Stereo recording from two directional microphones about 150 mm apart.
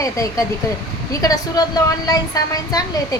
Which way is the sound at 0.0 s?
20° left (ahead or behind).